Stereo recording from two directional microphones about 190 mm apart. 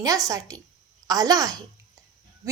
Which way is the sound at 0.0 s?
20° right (ahead or behind).